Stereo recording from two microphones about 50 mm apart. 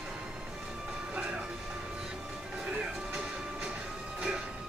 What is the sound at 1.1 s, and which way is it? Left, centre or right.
Train, right.